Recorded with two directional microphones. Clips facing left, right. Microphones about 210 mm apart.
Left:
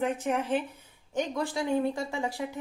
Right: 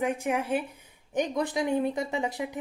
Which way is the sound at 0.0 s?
10° right (ahead or behind).